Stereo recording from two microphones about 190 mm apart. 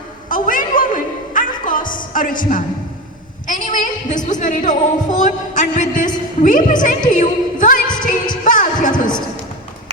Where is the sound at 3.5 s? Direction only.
40° left (ahead or behind).